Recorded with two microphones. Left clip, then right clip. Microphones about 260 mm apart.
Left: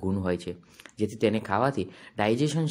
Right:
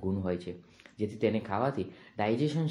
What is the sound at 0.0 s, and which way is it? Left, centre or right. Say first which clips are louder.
Speech: left 4 dB; left.